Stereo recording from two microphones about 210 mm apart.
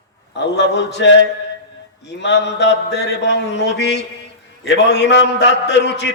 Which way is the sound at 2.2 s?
55° left (ahead or behind).